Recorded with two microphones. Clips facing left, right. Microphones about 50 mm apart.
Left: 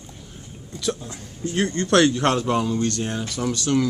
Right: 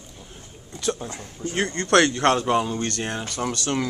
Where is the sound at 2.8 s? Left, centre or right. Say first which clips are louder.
Left 3 dB; right.